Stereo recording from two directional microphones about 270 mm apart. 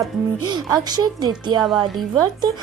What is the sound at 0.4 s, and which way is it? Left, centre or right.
Speech, centre.